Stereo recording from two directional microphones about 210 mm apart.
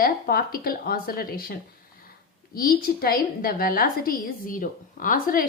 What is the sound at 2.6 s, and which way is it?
A woman's voice, 45° left (ahead or behind).